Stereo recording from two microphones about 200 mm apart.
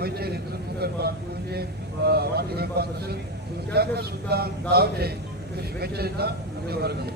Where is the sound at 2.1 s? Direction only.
55° right (ahead or behind).